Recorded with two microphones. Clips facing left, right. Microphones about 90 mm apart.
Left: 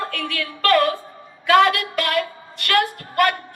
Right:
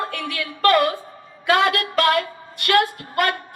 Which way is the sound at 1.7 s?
30° right (ahead or behind).